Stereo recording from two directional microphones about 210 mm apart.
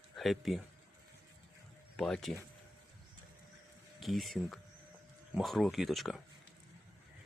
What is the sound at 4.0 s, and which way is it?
Speech, centre (ahead or behind).